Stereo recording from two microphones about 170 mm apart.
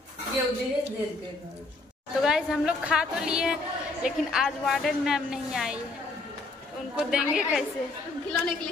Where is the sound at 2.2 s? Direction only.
5° right (ahead or behind).